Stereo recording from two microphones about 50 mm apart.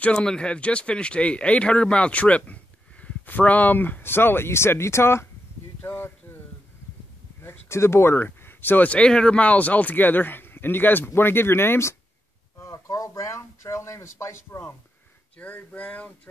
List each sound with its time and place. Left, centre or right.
0.0 s speech: left
5.8 s a sound: left
7.4 s speech: left
8.8 s speech: left
12.6 s speech: left
15.3 s speech: left